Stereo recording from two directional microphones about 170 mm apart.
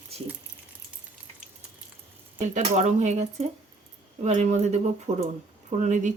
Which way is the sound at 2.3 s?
45° right (ahead or behind).